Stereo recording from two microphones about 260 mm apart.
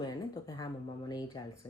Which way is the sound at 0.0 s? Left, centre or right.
Centre.